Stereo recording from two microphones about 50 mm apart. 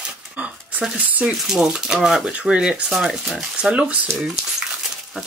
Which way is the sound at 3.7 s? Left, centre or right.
Right.